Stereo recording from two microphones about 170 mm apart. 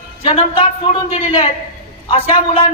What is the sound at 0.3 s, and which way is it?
Speech, 30° left (ahead or behind).